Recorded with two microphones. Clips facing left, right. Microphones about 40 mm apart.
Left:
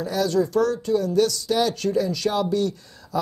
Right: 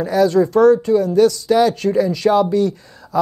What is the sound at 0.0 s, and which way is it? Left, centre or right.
Speech, right.